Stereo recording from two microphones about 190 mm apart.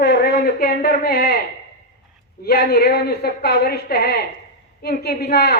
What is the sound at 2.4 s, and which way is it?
A woman's voice, 60° left (ahead or behind).